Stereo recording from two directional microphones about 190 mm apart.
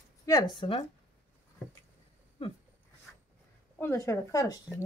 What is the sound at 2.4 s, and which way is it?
Speech, 30° left (ahead or behind).